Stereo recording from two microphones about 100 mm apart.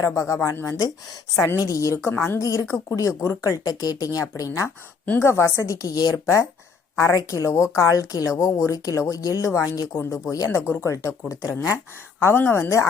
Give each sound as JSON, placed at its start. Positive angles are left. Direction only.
{"t": 0.0, "sound": "a woman's voice", "side_deg": 30}
{"t": 6.2, "sound": "a woman's voice", "side_deg": 30}